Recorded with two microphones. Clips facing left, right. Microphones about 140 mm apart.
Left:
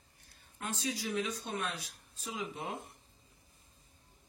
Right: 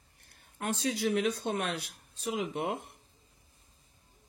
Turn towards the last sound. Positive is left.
turn(degrees=-65)  # may be behind; listen again after turning